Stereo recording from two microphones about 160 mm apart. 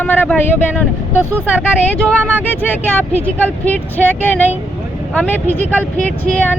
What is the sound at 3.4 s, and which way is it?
Speech, 10° left (ahead or behind).